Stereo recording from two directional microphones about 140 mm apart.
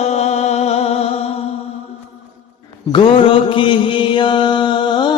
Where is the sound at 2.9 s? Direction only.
40° left (ahead or behind).